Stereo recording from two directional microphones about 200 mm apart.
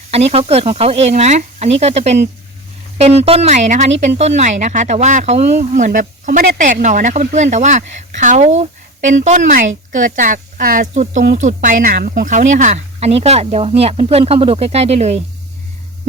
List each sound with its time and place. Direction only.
0.1 s a woman's voice: 30° right (ahead or behind)